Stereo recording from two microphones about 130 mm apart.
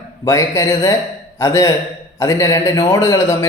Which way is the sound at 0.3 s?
25° left (ahead or behind).